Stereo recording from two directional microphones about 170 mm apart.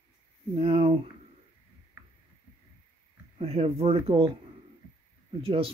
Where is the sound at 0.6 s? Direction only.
35° right (ahead or behind).